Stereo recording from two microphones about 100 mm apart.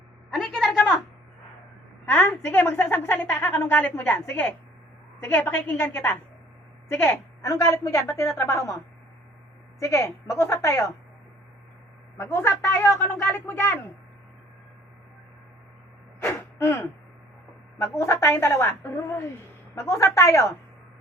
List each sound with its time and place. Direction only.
0.3 s a sound: 5° left (ahead or behind)
2.0 s a woman's voice: 20° left (ahead or behind)
9.8 s a woman's voice: 30° left (ahead or behind)
12.3 s a woman's voice: 25° left (ahead or behind)
16.6 s a woman's voice: 30° left (ahead or behind)